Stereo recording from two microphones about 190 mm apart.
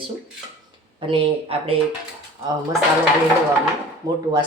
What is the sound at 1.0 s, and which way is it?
Speech, 30° right (ahead or behind).